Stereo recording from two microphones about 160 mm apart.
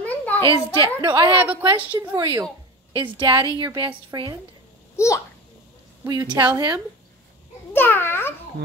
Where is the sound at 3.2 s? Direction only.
30° right (ahead or behind).